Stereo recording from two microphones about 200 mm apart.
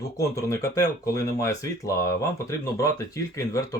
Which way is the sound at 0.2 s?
15° left (ahead or behind).